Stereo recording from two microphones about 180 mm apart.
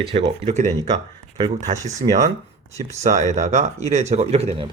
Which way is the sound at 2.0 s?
30° right (ahead or behind).